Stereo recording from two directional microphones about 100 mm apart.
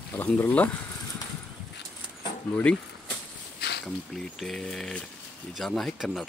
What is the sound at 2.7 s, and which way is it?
Speech, 10° left (ahead or behind).